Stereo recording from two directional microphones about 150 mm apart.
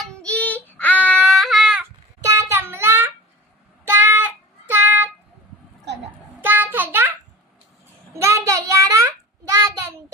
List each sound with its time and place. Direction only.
0.0 s child singing: 5° left (ahead or behind)
2.2 s child singing: 20° right (ahead or behind)
4.7 s a sound: 15° right (ahead or behind)
6.4 s child singing: 15° right (ahead or behind)
8.1 s child singing: 20° right (ahead or behind)